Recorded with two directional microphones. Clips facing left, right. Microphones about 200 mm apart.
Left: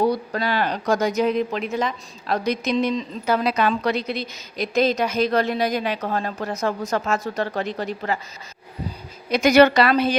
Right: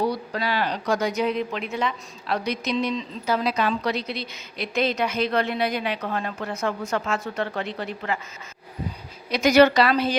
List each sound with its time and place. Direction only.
0.1 s speech: 50° left (ahead or behind)
9.3 s speech: 55° left (ahead or behind)